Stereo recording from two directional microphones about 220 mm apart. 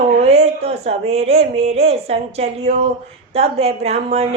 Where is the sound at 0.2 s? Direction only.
30° right (ahead or behind).